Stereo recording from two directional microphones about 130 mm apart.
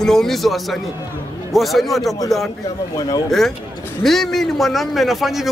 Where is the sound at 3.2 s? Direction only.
Centre (ahead or behind).